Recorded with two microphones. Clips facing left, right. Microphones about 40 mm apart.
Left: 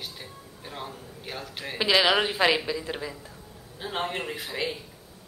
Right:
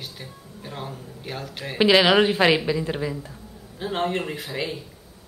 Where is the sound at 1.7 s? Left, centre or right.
Centre.